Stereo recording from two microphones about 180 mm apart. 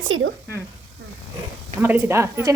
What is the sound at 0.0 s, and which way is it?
Speech, 90° right.